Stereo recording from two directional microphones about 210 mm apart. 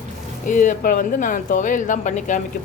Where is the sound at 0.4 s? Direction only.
40° left (ahead or behind).